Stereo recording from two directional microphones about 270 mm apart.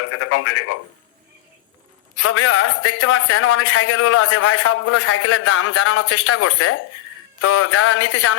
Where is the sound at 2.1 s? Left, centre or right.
Left.